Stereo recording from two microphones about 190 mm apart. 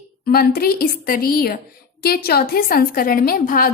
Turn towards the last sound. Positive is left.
turn(degrees=50)  # may be behind; listen again after turning